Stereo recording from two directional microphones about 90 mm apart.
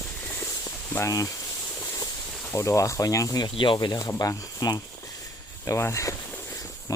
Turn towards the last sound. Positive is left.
turn(degrees=35)  # may be behind; listen again after turning